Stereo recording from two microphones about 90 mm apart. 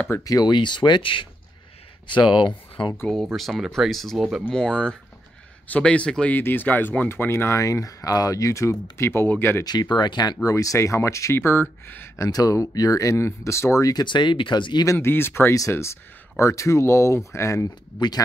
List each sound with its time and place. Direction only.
0.2 s speech: 45° left (ahead or behind); by 1.3 s 70° left (ahead or behind)
2.0 s speech: 60° left (ahead or behind)
3.1 s speech: centre (ahead or behind)
4.5 s a man's voice: 10° left (ahead or behind)
6.3 s speech: 20° left (ahead or behind)
9.7 s speech: 55° left (ahead or behind)
10.5 s speech: 35° left (ahead or behind)
12.3 s speech: 40° left (ahead or behind)
14.0 s speech: 60° left (ahead or behind)
14.9 s speech: 25° left (ahead or behind)